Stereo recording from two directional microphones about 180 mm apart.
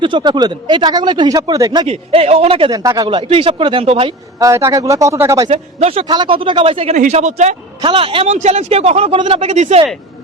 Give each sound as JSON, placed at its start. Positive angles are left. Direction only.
{"t": 0.0, "sound": "speech", "side_deg": -25}
{"t": 4.4, "sound": "speech", "side_deg": -15}
{"t": 5.5, "sound": "speech", "side_deg": -35}